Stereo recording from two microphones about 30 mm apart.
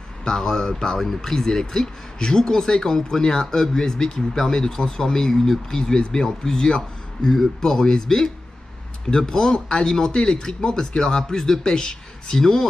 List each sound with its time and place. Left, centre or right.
0.2 s speech: centre
0.9 s speech: centre